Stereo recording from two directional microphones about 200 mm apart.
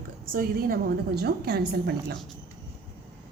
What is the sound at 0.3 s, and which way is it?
A woman's voice, 50° right (ahead or behind).